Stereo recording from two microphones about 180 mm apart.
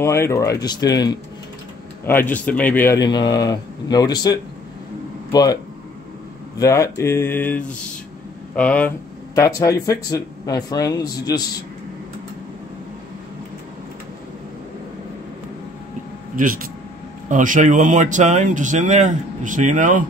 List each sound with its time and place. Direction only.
0.0 s speech: 15° left (ahead or behind)
2.0 s speech: 10° left (ahead or behind)
3.0 s speech: 25° left (ahead or behind)
6.6 s speech: 15° left (ahead or behind)
9.3 s speech: 15° left (ahead or behind)
16.4 s speech: 50° right (ahead or behind)